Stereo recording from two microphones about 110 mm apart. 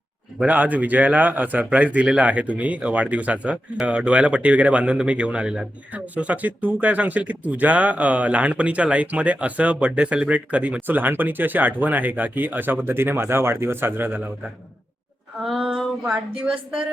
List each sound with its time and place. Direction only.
0.3 s a man's voice: 15° right (ahead or behind)
15.4 s a man's voice: 5° right (ahead or behind)